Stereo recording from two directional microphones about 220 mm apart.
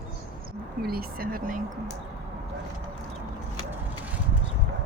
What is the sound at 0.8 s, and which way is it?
Speech, 45° right (ahead or behind).